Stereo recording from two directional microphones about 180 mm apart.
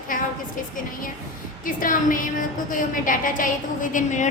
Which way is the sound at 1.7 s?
50° left (ahead or behind).